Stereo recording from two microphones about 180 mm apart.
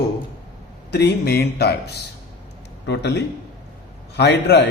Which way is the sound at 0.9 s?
65° left (ahead or behind).